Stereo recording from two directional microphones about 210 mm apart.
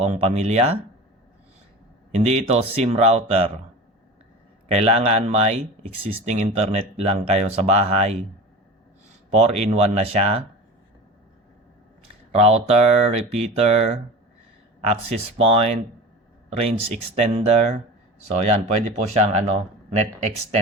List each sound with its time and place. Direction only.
0.0 s speech: 30° right (ahead or behind)
2.1 s speech: 30° right (ahead or behind)
4.7 s speech: 30° right (ahead or behind)
9.3 s speech: 30° right (ahead or behind)
12.3 s speech: 30° right (ahead or behind)
15.4 s speech: 30° right (ahead or behind)
17.2 s speech: 30° right (ahead or behind)